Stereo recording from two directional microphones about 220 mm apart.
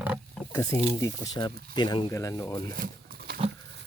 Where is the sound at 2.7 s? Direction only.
40° right (ahead or behind).